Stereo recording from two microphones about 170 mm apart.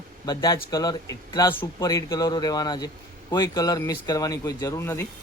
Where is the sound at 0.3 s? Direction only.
20° left (ahead or behind).